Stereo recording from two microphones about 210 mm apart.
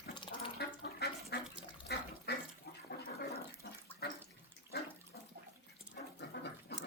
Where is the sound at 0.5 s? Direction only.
50° left (ahead or behind).